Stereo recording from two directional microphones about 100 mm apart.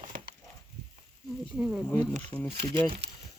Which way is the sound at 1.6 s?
5° right (ahead or behind).